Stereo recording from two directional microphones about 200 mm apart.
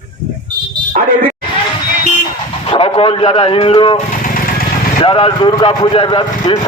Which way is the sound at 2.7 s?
25° left (ahead or behind).